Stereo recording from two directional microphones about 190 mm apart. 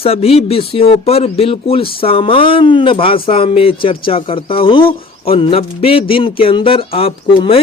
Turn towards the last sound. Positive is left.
turn(degrees=30)  # may be behind; listen again after turning